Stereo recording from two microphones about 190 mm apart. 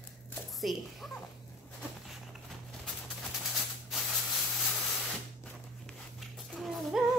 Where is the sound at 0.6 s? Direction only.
Centre (ahead or behind).